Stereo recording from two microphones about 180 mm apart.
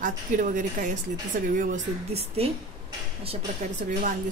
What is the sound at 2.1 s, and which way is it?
Speech, 35° right (ahead or behind).